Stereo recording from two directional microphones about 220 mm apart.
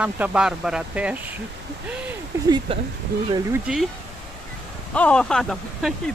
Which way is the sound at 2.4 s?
20° right (ahead or behind).